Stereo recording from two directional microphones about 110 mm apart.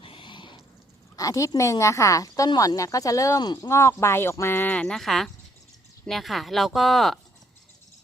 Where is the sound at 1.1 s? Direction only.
35° left (ahead or behind).